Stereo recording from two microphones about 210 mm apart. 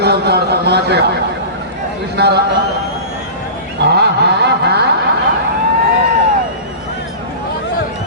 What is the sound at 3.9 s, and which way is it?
Vehicle, 50° right (ahead or behind).